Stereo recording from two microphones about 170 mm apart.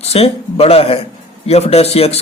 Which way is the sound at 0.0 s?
35° left (ahead or behind).